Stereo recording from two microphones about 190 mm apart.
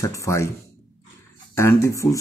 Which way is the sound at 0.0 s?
15° left (ahead or behind).